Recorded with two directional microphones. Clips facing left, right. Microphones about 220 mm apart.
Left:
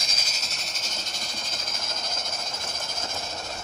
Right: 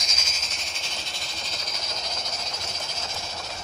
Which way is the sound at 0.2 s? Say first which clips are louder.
Even; 35° left (ahead or behind).